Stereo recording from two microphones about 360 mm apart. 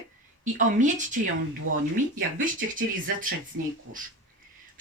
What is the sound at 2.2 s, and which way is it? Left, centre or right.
Speech, right.